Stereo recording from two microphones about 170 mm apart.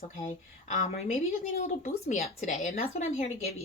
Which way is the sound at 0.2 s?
45° left (ahead or behind).